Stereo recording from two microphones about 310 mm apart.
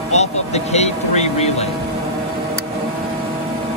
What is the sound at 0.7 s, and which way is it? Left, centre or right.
Speech, left.